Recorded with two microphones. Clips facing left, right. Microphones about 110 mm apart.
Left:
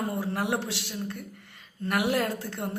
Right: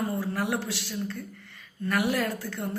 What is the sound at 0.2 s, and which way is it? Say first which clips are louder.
A woman's voice: even; 20° left (ahead or behind).